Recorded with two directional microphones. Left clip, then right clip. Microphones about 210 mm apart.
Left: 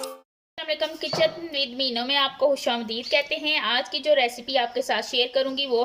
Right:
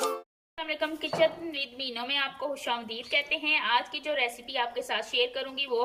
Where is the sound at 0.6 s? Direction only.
30° left (ahead or behind).